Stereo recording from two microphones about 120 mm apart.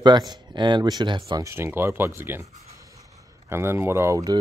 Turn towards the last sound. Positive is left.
turn(degrees=-20)  # may be behind; listen again after turning